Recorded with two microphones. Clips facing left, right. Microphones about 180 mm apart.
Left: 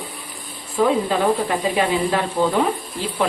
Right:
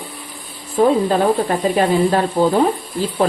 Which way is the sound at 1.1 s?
40° right (ahead or behind).